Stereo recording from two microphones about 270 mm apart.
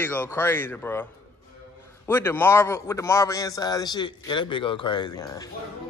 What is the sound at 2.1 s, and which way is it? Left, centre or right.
A man's voice, centre.